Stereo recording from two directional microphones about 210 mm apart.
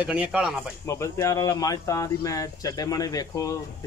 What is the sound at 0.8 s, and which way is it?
Speech, 15° left (ahead or behind).